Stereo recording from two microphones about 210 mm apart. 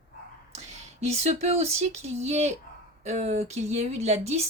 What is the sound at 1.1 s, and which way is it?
Speech, 30° right (ahead or behind).